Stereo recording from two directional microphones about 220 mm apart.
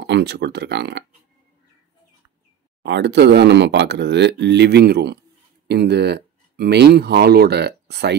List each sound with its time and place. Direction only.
0.0 s speech: 50° right (ahead or behind)
2.8 s speech: 50° right (ahead or behind)